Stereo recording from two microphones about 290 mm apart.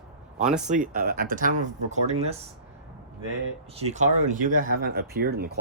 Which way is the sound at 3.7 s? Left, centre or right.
Right.